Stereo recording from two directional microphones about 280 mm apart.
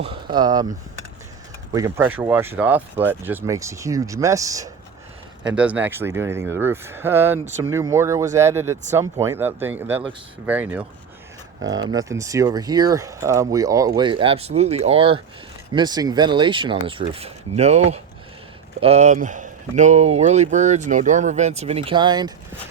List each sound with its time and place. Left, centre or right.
0.3 s speech: centre
1.7 s speech: centre